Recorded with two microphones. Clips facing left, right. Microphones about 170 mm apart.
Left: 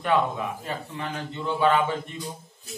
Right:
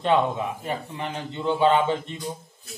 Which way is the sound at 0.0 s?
20° right (ahead or behind).